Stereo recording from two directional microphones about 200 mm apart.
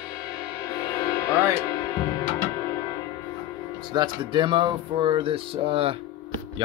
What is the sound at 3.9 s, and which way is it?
Speech, 20° right (ahead or behind).